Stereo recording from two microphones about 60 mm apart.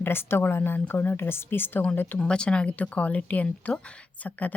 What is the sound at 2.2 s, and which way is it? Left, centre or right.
Speech, centre.